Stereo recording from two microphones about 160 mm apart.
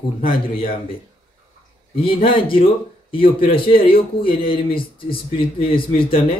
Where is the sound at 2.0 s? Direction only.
35° left (ahead or behind).